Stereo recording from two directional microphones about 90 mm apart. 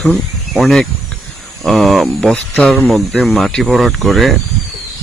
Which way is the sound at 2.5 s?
15° left (ahead or behind).